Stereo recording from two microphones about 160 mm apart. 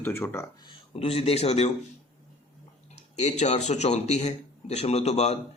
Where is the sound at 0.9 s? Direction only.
35° left (ahead or behind).